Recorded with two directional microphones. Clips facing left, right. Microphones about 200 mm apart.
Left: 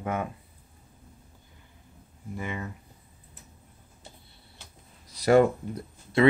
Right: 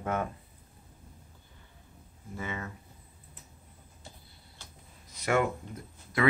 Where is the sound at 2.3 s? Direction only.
15° left (ahead or behind).